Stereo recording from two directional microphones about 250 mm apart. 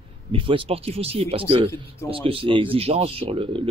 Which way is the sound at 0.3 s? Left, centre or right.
Right.